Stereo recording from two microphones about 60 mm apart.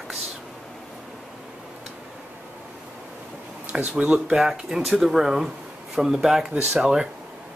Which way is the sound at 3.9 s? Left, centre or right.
Centre.